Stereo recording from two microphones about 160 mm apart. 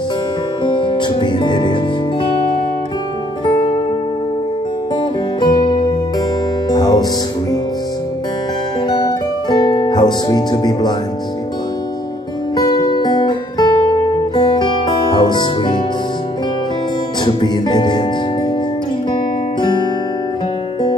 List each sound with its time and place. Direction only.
0.7 s music: 30° left (ahead or behind)
5.4 s music: 25° left (ahead or behind)
8.8 s music: 25° left (ahead or behind)
12.5 s guitar: 25° left (ahead or behind)
17.2 s music: 25° left (ahead or behind)
19.6 s music: 30° left (ahead or behind)